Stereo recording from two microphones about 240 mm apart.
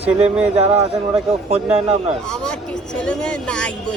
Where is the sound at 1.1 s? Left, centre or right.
Right.